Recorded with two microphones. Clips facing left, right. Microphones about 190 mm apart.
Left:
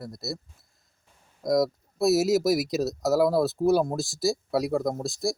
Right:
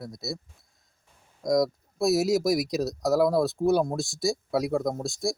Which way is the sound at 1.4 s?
5° left (ahead or behind).